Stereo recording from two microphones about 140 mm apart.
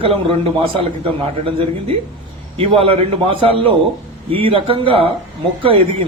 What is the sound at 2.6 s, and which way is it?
Speech, 40° right (ahead or behind).